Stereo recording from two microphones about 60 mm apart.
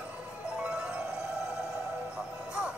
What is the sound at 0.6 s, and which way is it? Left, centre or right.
Music, centre.